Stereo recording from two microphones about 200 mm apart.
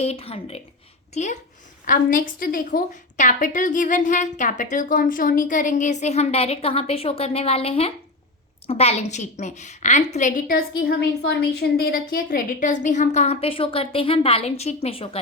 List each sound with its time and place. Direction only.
0.0 s a woman's voice: 30° left (ahead or behind)